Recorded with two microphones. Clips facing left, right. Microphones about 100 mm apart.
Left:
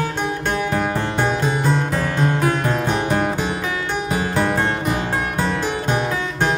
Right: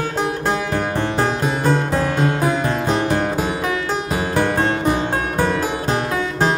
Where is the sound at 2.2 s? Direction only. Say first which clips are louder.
Right 1 dB; 5° right (ahead or behind).